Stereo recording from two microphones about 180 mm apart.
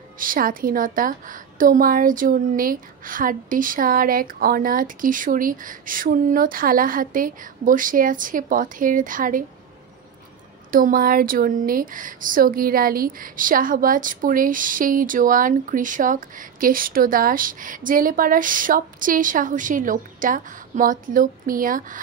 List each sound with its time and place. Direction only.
0.2 s a woman's voice: 50° right (ahead or behind)
10.7 s a woman's voice: 50° right (ahead or behind)